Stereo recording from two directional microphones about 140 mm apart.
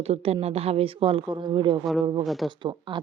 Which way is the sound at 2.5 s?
35° right (ahead or behind).